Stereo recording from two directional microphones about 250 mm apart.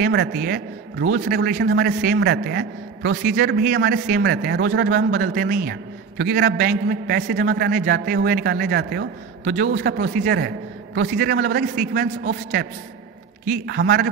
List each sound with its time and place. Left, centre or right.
0.0 s a man's voice: right